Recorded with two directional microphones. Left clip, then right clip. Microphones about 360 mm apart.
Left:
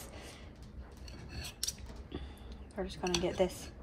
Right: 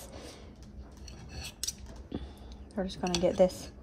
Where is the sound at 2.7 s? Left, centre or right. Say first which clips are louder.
Right 3 dB; right.